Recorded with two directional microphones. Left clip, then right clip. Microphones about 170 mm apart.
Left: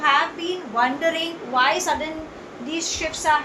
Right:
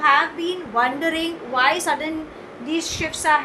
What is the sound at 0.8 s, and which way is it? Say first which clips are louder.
A woman's voice: even; 30° right (ahead or behind).